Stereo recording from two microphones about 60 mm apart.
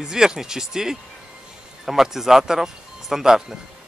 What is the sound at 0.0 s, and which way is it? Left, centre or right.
Speech, centre.